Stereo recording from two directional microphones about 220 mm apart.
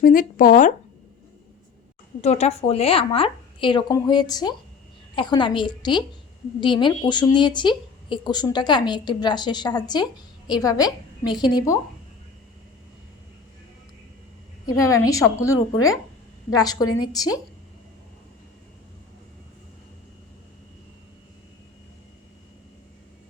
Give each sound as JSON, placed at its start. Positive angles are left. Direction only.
{"t": 0.0, "sound": "speech", "side_deg": 40}
{"t": 2.2, "sound": "speech", "side_deg": 30}
{"t": 14.7, "sound": "a woman's voice", "side_deg": 15}